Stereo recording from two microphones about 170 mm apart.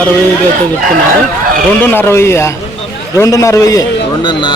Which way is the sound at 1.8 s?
10° left (ahead or behind).